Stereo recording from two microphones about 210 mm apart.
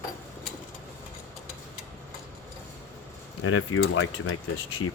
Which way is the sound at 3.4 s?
75° left (ahead or behind).